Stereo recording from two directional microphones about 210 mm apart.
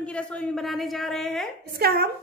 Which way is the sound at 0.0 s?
5° left (ahead or behind).